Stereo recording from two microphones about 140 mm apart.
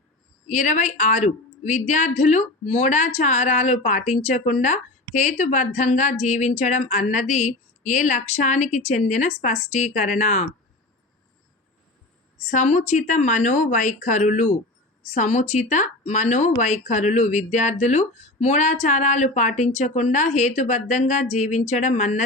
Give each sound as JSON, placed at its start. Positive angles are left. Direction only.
{"t": 0.4, "sound": "speech", "side_deg": 60}
{"t": 12.5, "sound": "speech", "side_deg": 55}